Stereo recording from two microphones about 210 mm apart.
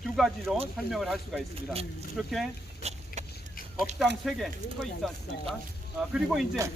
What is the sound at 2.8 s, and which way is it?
Vehicle, 35° right (ahead or behind).